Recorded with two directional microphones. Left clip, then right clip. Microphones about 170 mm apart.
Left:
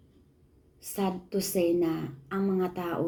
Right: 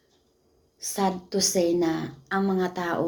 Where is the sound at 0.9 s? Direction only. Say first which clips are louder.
Right 5 dB; 35° right (ahead or behind).